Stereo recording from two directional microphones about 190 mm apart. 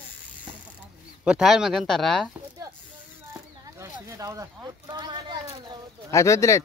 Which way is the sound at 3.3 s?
15° right (ahead or behind).